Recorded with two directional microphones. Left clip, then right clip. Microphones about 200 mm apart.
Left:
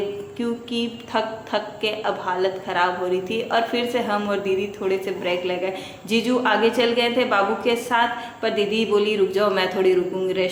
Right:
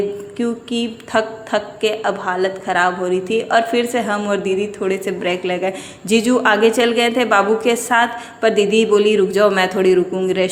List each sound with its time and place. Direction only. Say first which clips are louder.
0.3 s a woman's voice: right 4 dB; 30° right (ahead or behind)